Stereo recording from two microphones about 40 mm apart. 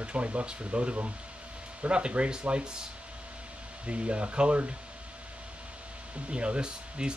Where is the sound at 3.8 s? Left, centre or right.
Right.